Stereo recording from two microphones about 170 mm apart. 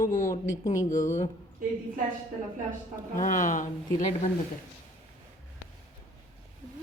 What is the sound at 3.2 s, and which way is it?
Speech, 50° left (ahead or behind).